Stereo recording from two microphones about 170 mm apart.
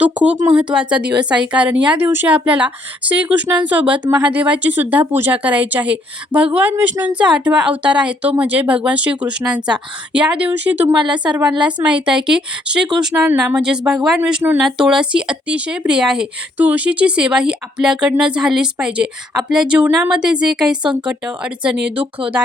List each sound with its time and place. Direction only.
0.0 s speech: 5° right (ahead or behind)
10.9 s a woman's voice: 25° right (ahead or behind)
11.6 s speech: 5° right (ahead or behind)
20.8 s a woman's voice: 30° right (ahead or behind)
21.1 s speech: 5° right (ahead or behind)